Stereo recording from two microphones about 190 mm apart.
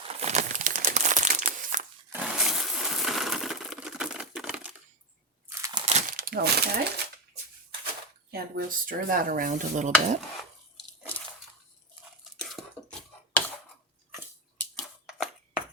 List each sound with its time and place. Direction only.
0.2 s crumpling: 40° right (ahead or behind)
2.1 s coin: 5° right (ahead or behind)
5.5 s crunch: 15° right (ahead or behind)
5.8 s crumpling: 40° right (ahead or behind)
8.3 s speech: 50° right (ahead or behind)
12.2 s a sound: centre (ahead or behind)
14.6 s a sound: centre (ahead or behind)